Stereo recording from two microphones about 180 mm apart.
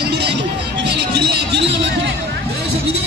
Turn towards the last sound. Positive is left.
turn(degrees=-70)  # may be behind; listen again after turning